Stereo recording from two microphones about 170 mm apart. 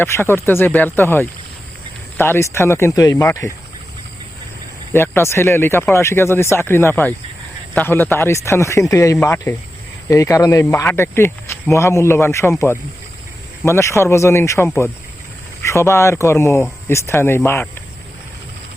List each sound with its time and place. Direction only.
0.0 s speech: 15° left (ahead or behind)
4.9 s speech: 15° left (ahead or behind)